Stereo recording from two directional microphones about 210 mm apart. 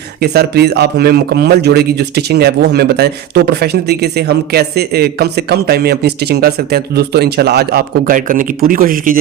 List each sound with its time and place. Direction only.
0.2 s a man's voice: 50° right (ahead or behind)